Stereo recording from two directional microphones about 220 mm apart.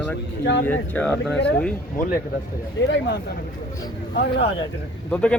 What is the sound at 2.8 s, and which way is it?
Speech, 55° left (ahead or behind).